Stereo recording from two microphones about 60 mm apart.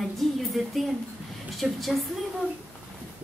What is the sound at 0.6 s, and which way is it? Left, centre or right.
A woman's voice, centre.